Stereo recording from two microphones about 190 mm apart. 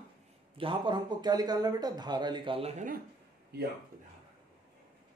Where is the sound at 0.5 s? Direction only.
25° right (ahead or behind).